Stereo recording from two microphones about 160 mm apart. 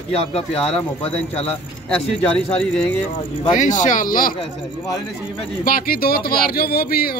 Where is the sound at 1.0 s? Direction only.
40° left (ahead or behind).